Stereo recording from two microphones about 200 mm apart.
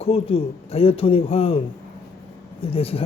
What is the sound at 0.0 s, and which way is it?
Speech, 30° left (ahead or behind).